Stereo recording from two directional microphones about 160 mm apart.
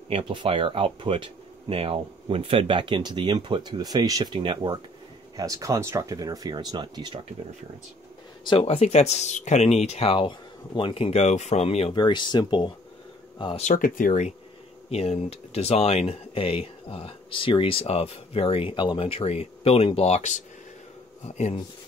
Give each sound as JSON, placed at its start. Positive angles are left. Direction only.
{"t": 0.1, "sound": "speech", "side_deg": -30}
{"t": 8.5, "sound": "speech", "side_deg": 40}
{"t": 11.9, "sound": "speech", "side_deg": 30}
{"t": 13.6, "sound": "speech", "side_deg": 55}
{"t": 14.9, "sound": "speech", "side_deg": 40}